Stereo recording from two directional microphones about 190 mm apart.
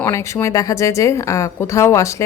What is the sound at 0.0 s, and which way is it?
Speech, 15° left (ahead or behind).